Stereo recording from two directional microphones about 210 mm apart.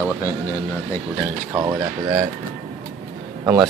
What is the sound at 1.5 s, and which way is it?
Speech, 15° right (ahead or behind).